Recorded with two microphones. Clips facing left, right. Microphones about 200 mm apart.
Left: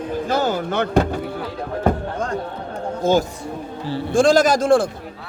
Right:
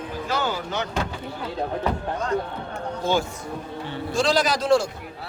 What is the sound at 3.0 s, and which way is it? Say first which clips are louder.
A man's voice: left 6 dB; 45° left (ahead or behind).